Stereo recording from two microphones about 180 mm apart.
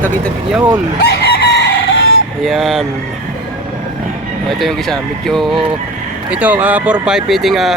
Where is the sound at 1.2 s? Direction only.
60° left (ahead or behind).